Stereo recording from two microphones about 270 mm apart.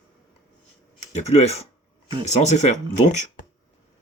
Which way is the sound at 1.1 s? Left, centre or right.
Left.